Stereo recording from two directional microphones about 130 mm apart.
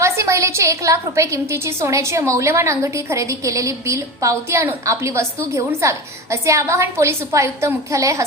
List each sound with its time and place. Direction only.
0.0 s a woman's voice: 20° right (ahead or behind)